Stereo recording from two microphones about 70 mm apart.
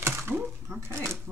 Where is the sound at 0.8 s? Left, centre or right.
Right.